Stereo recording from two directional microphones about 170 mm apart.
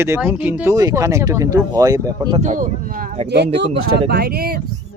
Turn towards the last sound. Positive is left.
turn(degrees=-60)  # may be behind; listen again after turning